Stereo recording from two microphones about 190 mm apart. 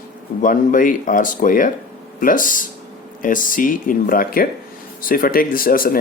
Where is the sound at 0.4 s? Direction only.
45° left (ahead or behind).